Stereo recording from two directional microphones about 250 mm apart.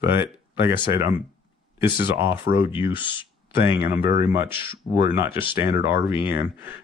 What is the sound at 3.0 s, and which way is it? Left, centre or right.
Speech, centre.